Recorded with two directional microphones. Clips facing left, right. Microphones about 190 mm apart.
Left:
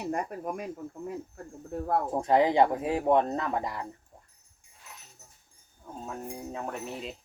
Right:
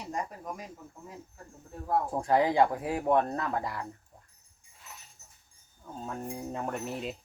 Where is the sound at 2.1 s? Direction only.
20° left (ahead or behind).